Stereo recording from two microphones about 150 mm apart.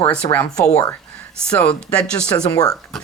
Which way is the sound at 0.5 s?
20° left (ahead or behind).